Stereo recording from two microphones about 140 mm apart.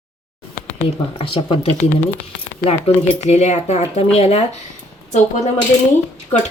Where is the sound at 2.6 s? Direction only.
50° left (ahead or behind).